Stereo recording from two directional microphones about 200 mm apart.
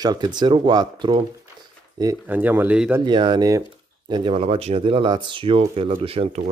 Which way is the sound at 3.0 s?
20° right (ahead or behind).